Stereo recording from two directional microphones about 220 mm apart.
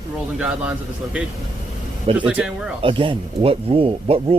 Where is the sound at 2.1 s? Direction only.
5° right (ahead or behind).